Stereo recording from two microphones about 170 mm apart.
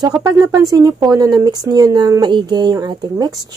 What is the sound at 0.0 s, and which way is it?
Speech, 20° right (ahead or behind).